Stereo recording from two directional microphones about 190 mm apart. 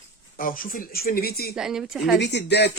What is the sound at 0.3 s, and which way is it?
A man's voice, 45° left (ahead or behind).